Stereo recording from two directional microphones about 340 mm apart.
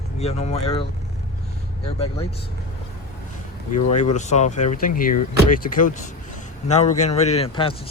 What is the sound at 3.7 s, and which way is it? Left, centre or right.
Speech, left.